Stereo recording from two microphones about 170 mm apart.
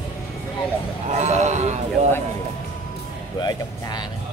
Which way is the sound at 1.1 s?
40° right (ahead or behind).